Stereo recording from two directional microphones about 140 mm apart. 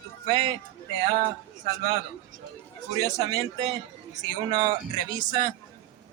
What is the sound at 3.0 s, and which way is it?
A man's voice, 25° right (ahead or behind).